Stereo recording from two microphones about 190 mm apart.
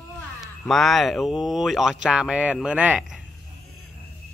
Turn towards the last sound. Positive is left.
turn(degrees=-5)  # may be behind; listen again after turning